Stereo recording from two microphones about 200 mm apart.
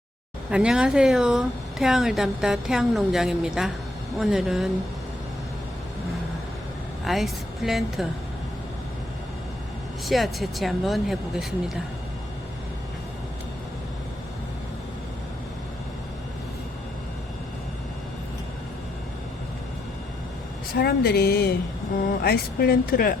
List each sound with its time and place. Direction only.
0.5 s a woman's voice: 5° right (ahead or behind)
7.0 s a woman's voice: centre (ahead or behind)
10.1 s a woman's voice: centre (ahead or behind)
20.7 s speech: 50° left (ahead or behind)